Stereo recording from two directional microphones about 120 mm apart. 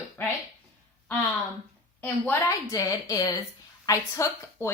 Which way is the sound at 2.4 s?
30° left (ahead or behind).